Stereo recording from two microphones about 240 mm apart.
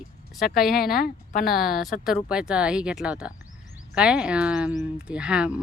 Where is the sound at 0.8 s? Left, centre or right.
Left.